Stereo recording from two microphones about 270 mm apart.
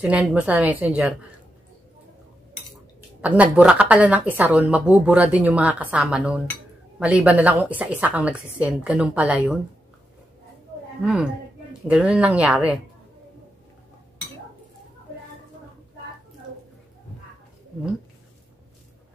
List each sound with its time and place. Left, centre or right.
0.0 s speech: centre
3.2 s speech: centre
11.9 s speech: centre